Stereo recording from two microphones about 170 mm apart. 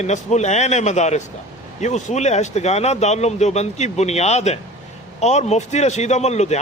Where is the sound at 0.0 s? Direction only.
40° left (ahead or behind).